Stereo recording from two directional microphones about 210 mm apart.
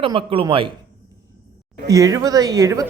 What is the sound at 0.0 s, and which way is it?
Speech, 25° right (ahead or behind).